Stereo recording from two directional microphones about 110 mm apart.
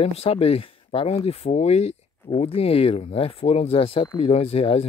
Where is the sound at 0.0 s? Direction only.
65° left (ahead or behind).